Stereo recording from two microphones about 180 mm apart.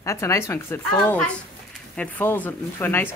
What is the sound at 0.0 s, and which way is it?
Speech, 15° left (ahead or behind).